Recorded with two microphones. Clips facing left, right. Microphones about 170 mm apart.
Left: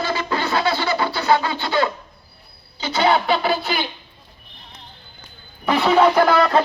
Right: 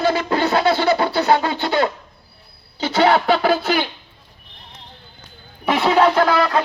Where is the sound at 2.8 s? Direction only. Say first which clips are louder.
Right 3 dB; 90° right.